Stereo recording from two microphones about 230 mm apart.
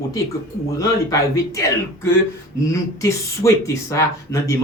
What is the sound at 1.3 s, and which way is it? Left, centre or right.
Speech, centre.